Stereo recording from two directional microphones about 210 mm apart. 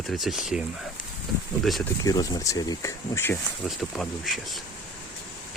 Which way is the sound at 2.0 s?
15° left (ahead or behind).